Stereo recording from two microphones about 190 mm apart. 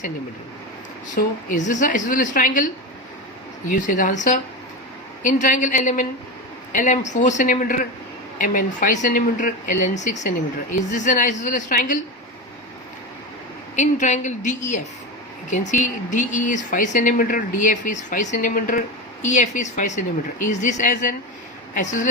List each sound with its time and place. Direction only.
1.1 s a woman's voice: 40° left (ahead or behind)
3.7 s a woman's voice: 45° left (ahead or behind)
13.7 s speech: 40° left (ahead or behind)